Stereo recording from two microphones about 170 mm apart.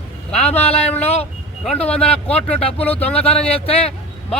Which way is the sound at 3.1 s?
10° left (ahead or behind).